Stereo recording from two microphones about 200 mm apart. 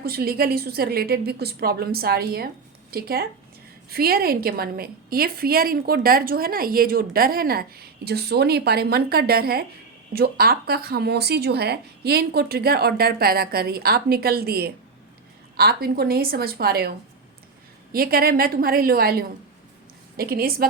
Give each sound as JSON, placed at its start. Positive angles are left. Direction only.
{"t": 0.0, "sound": "a woman's voice", "side_deg": -50}
{"t": 17.9, "sound": "a woman's voice", "side_deg": -50}